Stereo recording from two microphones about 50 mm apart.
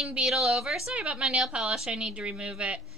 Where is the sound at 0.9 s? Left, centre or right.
Right.